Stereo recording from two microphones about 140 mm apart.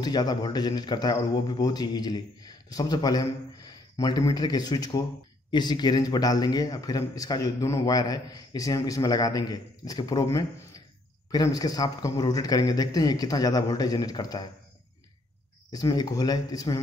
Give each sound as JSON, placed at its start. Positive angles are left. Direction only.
{"t": 0.0, "sound": "a man's voice", "side_deg": 30}
{"t": 15.7, "sound": "a man's voice", "side_deg": 25}